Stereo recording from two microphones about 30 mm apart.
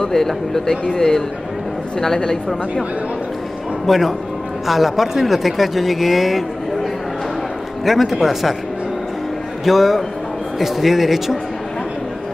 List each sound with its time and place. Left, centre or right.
0.1 s a man's voice: centre
3.8 s a man's voice: centre
7.8 s speech: centre
9.7 s speech: centre